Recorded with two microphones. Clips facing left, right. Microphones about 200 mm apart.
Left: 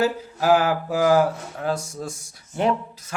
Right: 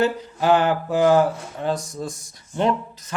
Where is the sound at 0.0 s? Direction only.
5° left (ahead or behind).